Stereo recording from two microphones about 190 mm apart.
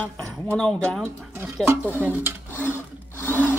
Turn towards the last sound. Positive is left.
turn(degrees=10)  # may be behind; listen again after turning